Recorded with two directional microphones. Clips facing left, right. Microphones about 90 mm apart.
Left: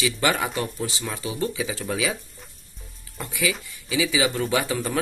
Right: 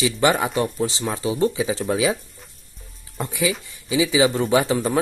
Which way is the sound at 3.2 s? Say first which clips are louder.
Right 4 dB; 25° right (ahead or behind).